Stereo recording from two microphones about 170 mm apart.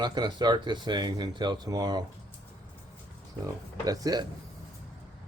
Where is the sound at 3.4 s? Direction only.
20° right (ahead or behind).